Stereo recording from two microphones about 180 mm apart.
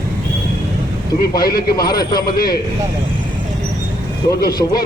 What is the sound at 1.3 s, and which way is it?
Speech, 20° left (ahead or behind).